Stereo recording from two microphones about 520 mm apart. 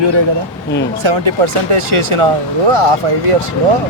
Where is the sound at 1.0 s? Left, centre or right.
Right.